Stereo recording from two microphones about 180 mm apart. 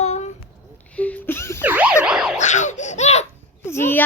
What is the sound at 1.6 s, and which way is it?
Emergency vehicle, 10° right (ahead or behind).